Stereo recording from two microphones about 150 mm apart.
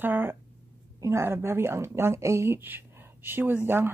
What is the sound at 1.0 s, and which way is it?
Speech, 15° right (ahead or behind).